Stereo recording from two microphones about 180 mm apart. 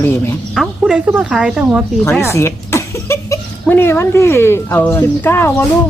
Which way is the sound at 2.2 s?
15° left (ahead or behind).